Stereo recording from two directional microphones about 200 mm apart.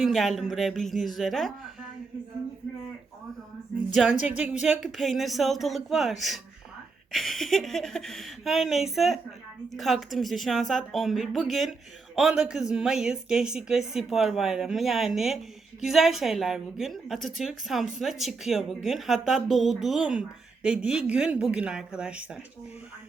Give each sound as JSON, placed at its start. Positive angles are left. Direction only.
{"t": 0.0, "sound": "speech", "side_deg": 0}
{"t": 3.9, "sound": "speech", "side_deg": -5}